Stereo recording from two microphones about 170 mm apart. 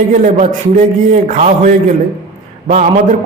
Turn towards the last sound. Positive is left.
turn(degrees=-45)  # may be behind; listen again after turning